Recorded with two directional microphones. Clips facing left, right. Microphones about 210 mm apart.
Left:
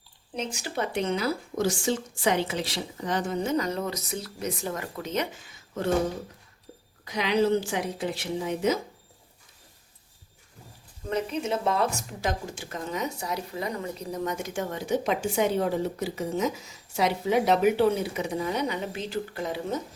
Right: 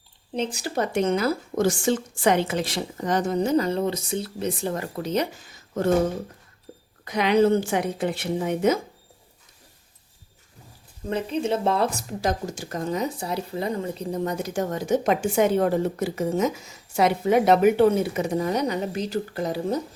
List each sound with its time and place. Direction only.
0.3 s a woman's voice: 35° right (ahead or behind)
7.0 s a woman's voice: 55° right (ahead or behind)
11.1 s a woman's voice: 30° right (ahead or behind)